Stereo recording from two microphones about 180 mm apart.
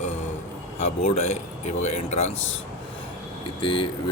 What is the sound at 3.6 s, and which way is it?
Speech, 25° left (ahead or behind).